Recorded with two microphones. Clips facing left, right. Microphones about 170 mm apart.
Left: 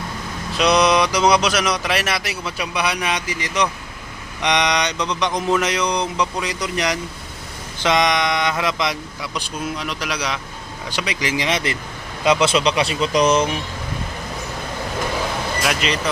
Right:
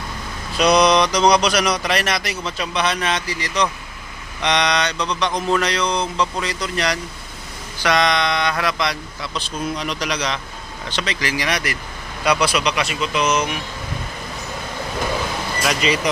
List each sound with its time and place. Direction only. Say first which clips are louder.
0.5 s speech: right 1 dB; centre (ahead or behind); by 3.7 s 20° left (ahead or behind)
4.4 s mantra: even; 15° left (ahead or behind)
9.8 s speech: right 2 dB; 5° left (ahead or behind); by 13.6 s 30° left (ahead or behind)
15.6 s speech: right 3 dB; centre (ahead or behind)